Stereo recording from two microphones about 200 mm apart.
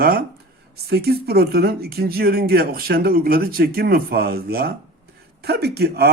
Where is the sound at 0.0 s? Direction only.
50° right (ahead or behind).